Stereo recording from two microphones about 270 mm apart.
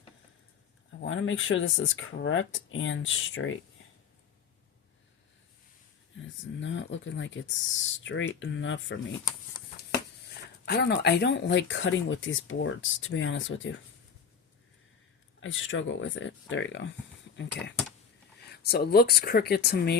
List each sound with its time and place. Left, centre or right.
1.0 s speech: left
6.6 s speech: left
10.7 s speech: left
15.4 s speech: left